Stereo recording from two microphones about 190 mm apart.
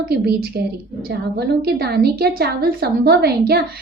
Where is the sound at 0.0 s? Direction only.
55° right (ahead or behind).